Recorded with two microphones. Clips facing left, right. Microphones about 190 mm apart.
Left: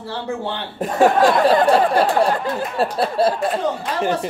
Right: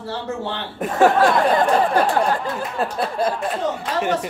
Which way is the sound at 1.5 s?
35° left (ahead or behind).